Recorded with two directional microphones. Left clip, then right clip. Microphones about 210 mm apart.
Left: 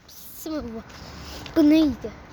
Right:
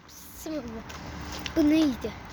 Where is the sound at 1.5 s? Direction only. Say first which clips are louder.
Left 5 dB; 35° left (ahead or behind).